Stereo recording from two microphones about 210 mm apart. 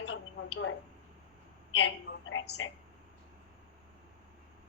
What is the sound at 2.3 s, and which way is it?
Speech, 70° left (ahead or behind).